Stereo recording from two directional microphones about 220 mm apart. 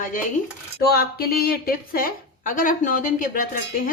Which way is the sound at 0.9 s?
45° left (ahead or behind).